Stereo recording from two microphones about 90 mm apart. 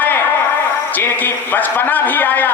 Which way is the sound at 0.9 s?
20° left (ahead or behind).